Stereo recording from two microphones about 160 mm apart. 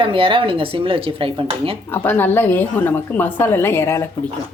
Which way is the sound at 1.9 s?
10° left (ahead or behind).